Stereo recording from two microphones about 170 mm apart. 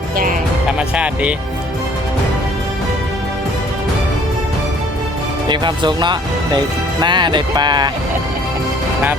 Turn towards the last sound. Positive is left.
turn(degrees=-25)  # may be behind; listen again after turning